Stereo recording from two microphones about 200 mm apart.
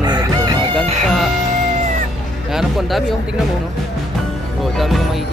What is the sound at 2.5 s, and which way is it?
Speech, centre (ahead or behind).